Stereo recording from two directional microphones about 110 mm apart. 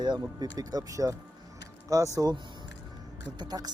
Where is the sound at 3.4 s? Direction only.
40° right (ahead or behind).